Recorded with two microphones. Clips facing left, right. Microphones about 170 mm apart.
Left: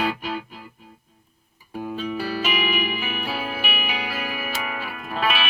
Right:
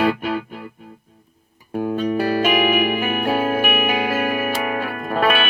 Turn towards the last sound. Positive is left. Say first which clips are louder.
# right 6 dB
turn(degrees=-50)  # may be behind; listen again after turning